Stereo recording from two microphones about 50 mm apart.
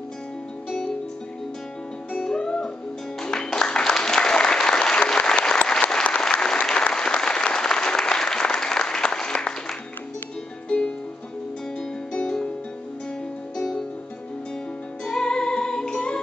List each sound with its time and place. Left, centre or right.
2.2 s music: centre
3.5 s applause: centre
10.7 s music: centre
12.1 s music: centre
15.0 s music: centre